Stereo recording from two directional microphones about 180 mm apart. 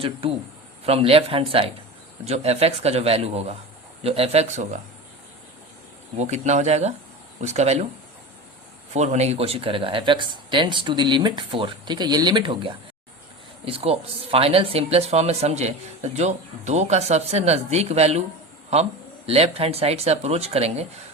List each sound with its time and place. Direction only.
0.0 s speech: 30° right (ahead or behind)
6.1 s speech: 40° right (ahead or behind)
8.9 s speech: 40° right (ahead or behind)